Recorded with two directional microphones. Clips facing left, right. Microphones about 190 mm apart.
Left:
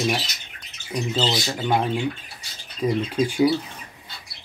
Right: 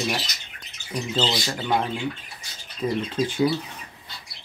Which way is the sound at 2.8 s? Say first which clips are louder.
Left 3 dB; 10° left (ahead or behind).